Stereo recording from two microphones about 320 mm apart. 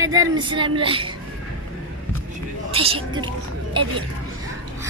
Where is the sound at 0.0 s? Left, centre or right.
Centre.